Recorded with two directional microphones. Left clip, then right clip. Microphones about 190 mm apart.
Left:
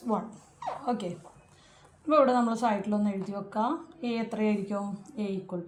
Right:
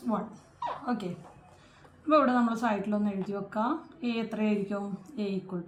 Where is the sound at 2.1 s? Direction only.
25° left (ahead or behind).